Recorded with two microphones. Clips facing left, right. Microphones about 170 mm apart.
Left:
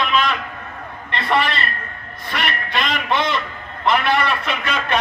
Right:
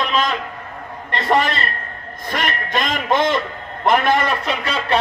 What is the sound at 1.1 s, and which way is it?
Speech, 40° right (ahead or behind).